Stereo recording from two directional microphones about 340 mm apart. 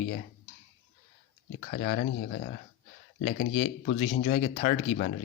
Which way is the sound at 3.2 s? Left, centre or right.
Left.